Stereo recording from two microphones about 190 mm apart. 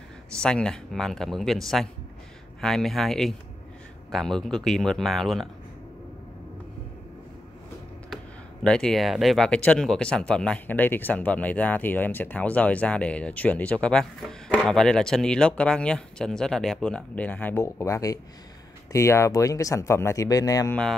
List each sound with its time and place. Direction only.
0.4 s speech: 5° left (ahead or behind)
8.6 s speech: 5° left (ahead or behind)